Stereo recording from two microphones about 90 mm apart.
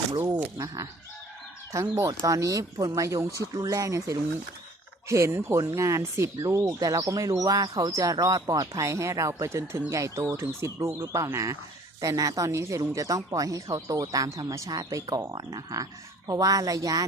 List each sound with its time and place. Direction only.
0.3 s speech: 35° right (ahead or behind)